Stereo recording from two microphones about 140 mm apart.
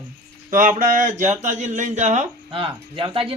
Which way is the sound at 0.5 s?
70° right (ahead or behind).